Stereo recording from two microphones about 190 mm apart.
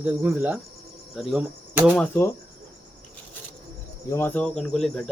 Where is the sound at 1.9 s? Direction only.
5° left (ahead or behind).